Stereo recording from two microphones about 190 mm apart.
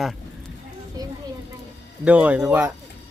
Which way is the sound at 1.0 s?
20° right (ahead or behind).